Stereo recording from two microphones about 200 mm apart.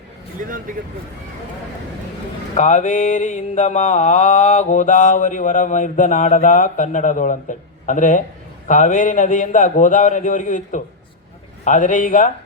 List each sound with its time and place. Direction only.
0.4 s speech: 40° right (ahead or behind)
2.6 s mantra: 40° left (ahead or behind)